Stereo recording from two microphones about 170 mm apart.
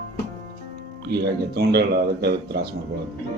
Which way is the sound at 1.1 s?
70° right (ahead or behind).